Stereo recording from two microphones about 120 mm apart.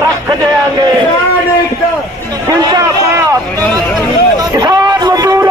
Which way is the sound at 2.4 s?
30° right (ahead or behind).